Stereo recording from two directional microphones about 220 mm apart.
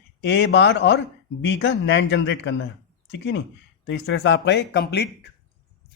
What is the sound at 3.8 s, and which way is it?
Speech, 55° left (ahead or behind).